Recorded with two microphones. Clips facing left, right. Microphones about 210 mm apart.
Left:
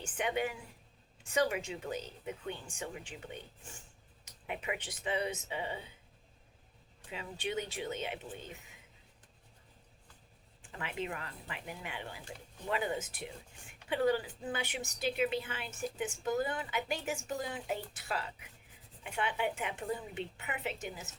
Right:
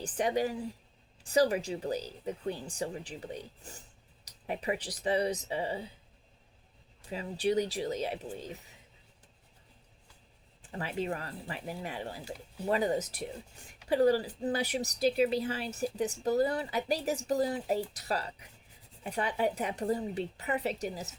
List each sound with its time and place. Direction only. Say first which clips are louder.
0.0 s a woman's voice: right 5 dB; 35° right (ahead or behind)
7.1 s a woman's voice: right 8 dB; 35° right (ahead or behind)
10.6 s a woman's voice: right 5 dB; 35° right (ahead or behind)